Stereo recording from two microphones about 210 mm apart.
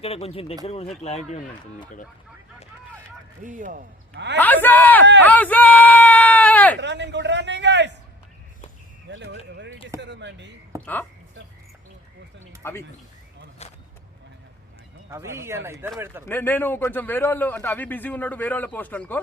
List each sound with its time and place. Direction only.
0.0 s speech: 30° left (ahead or behind)
3.4 s speech: 40° right (ahead or behind)
4.1 s a man's voice: 55° right (ahead or behind)
4.4 s speech: 10° left (ahead or behind)
5.2 s a sound: 5° left (ahead or behind)
6.7 s speech: 55° right (ahead or behind)
9.0 s speech: 60° right (ahead or behind)
10.7 s speech: 15° right (ahead or behind)
12.6 s a man's voice: 10° left (ahead or behind)
13.6 s vehicle: 30° left (ahead or behind)
15.1 s speech: 15° right (ahead or behind)
16.2 s a man's voice: 10° left (ahead or behind)